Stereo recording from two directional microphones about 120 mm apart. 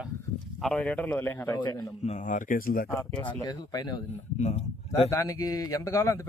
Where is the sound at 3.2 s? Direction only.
40° left (ahead or behind).